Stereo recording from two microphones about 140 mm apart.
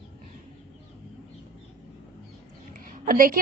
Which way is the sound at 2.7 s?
75° right (ahead or behind).